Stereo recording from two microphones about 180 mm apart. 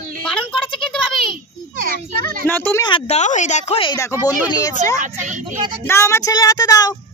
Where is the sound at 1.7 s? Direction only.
50° right (ahead or behind).